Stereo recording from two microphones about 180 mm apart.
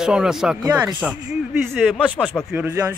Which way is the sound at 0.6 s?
15° right (ahead or behind).